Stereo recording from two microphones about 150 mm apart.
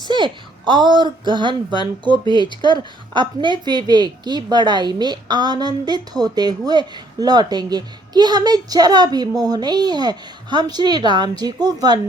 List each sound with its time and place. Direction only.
0.0 s a woman's voice: 30° right (ahead or behind)